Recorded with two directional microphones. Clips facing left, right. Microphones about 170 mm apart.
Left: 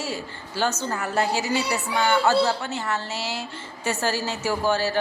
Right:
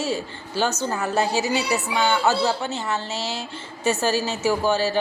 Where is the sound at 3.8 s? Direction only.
20° right (ahead or behind).